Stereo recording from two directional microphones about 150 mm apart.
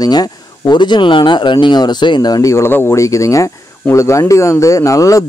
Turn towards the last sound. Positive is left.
turn(degrees=20)  # may be behind; listen again after turning